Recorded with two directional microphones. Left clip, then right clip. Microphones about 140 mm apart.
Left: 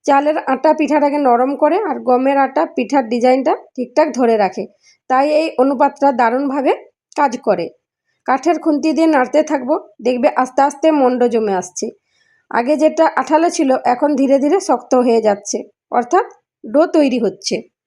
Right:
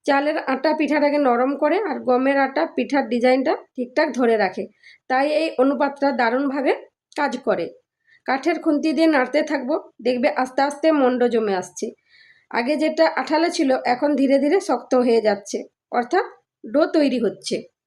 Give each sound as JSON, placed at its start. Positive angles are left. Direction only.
{"t": 0.0, "sound": "a woman's voice", "side_deg": 35}
{"t": 8.7, "sound": "a woman's voice", "side_deg": 35}